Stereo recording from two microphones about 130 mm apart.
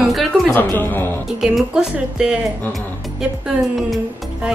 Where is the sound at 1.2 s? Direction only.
5° right (ahead or behind).